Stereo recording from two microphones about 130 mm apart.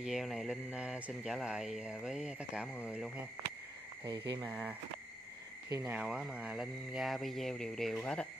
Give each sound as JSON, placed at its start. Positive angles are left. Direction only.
{"t": 0.0, "sound": "speech", "side_deg": -5}
{"t": 4.0, "sound": "speech", "side_deg": -30}
{"t": 4.4, "sound": "speech", "side_deg": -10}
{"t": 5.9, "sound": "speech", "side_deg": -10}